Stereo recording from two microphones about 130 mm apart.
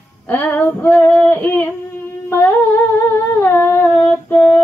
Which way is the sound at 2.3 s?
15° left (ahead or behind).